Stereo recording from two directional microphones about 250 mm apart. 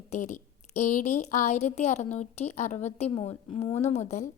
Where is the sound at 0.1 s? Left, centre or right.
Left.